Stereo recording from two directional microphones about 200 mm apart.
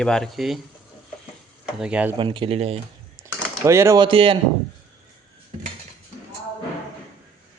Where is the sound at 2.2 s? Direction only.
25° right (ahead or behind).